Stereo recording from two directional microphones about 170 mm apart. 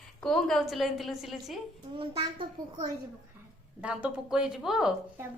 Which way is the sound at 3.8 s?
5° right (ahead or behind).